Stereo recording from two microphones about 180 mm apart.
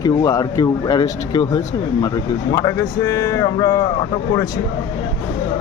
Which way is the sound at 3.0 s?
20° left (ahead or behind).